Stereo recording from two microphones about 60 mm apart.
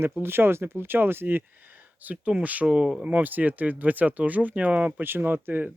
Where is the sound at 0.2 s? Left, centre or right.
Right.